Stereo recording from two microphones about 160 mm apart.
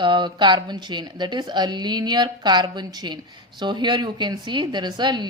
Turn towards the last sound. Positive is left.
turn(degrees=-25)  # may be behind; listen again after turning